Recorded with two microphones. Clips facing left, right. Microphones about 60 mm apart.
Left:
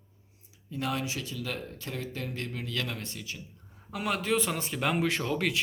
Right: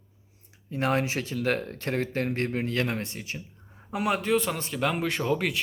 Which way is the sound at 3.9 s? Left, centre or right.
Centre.